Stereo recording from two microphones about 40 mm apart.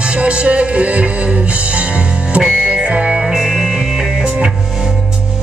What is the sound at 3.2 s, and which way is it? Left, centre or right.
Music, centre.